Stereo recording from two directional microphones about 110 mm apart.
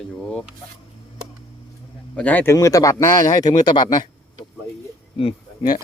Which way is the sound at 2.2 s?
15° left (ahead or behind).